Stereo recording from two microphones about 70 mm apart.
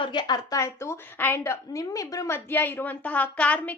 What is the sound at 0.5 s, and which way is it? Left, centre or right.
Speech, left.